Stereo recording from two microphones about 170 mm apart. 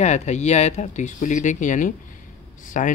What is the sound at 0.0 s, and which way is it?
Speech, 40° left (ahead or behind).